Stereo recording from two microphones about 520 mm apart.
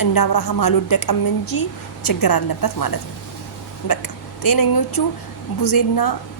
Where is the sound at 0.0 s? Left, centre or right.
Left.